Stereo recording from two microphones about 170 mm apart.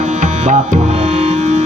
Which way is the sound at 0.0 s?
40° right (ahead or behind).